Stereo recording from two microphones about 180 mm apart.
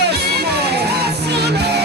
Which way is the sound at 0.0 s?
65° right (ahead or behind).